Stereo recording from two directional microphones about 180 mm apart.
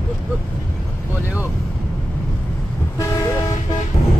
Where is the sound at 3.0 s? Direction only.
15° left (ahead or behind).